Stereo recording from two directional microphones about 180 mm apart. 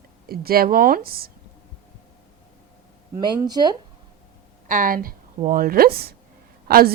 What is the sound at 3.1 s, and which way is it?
Speech, 20° right (ahead or behind).